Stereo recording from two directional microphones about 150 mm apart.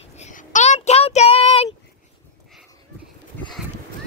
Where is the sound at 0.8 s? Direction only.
40° left (ahead or behind).